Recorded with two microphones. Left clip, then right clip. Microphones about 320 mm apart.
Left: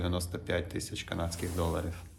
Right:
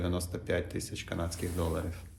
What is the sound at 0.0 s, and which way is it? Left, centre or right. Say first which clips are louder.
Speech: even; centre.